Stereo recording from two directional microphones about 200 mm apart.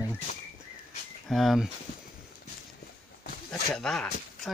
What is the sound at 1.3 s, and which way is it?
Speech, centre (ahead or behind).